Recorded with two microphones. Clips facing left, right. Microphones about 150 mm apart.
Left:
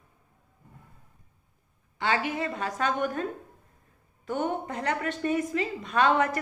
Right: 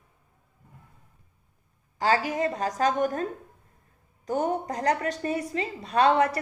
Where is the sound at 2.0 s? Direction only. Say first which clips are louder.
Right 4 dB; 35° right (ahead or behind).